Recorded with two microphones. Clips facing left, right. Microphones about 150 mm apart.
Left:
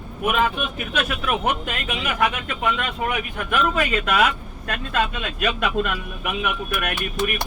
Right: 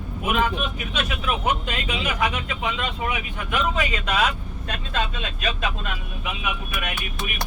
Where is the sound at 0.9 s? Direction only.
55° left (ahead or behind).